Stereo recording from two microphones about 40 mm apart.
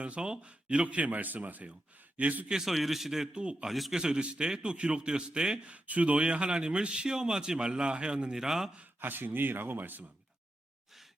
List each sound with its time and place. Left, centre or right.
0.0 s speech: right
2.5 s a man's voice: centre
3.3 s a man's voice: right
3.7 s a man's voice: centre
3.9 s a man's voice: right
5.7 s a man's voice: right
8.4 s a man's voice: centre
9.0 s speech: right